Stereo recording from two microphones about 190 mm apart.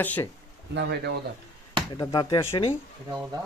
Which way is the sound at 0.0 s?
10° left (ahead or behind).